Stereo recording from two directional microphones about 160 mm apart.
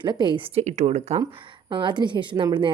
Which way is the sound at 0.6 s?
45° right (ahead or behind).